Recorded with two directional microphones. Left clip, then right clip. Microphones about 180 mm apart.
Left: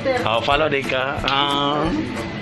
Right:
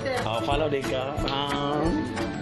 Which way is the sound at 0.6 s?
20° right (ahead or behind).